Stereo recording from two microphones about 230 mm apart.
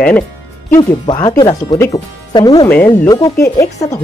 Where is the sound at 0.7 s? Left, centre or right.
Centre.